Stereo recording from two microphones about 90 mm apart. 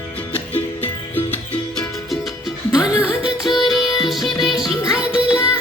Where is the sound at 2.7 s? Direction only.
10° right (ahead or behind).